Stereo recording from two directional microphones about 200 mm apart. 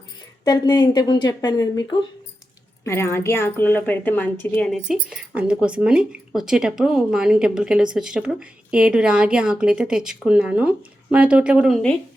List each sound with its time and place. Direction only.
0.4 s a woman's voice: 20° left (ahead or behind); by 11.9 s centre (ahead or behind)